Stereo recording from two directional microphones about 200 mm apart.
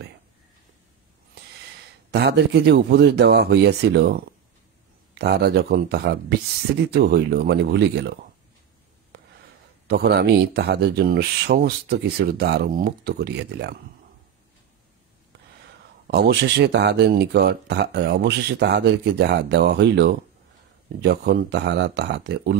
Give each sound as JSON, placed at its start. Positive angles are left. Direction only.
{"t": 2.0, "sound": "speech", "side_deg": -55}
{"t": 5.2, "sound": "speech", "side_deg": -55}
{"t": 9.8, "sound": "speech", "side_deg": -55}
{"t": 16.1, "sound": "speech", "side_deg": -55}